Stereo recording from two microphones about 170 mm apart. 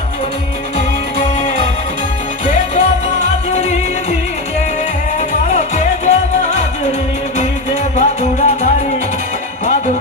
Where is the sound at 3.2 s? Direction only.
40° left (ahead or behind).